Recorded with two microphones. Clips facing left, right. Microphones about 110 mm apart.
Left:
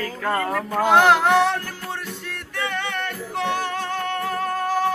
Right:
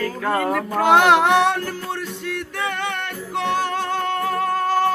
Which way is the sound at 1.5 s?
65° right (ahead or behind).